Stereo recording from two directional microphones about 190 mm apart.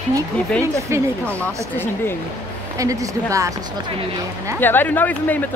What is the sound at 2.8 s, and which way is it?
Speech, 15° right (ahead or behind).